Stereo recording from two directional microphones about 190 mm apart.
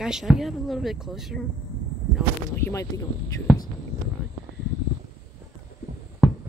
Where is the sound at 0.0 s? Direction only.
5° right (ahead or behind).